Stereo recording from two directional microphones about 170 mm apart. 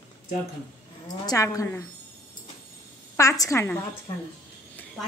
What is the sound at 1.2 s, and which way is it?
Speech, 20° left (ahead or behind).